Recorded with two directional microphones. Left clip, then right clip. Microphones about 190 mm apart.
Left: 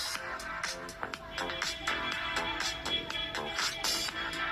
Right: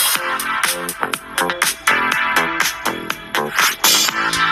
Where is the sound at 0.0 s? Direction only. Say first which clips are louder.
Right 18 dB; 50° right (ahead or behind).